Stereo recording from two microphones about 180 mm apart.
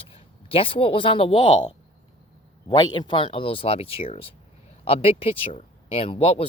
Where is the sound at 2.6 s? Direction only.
25° left (ahead or behind).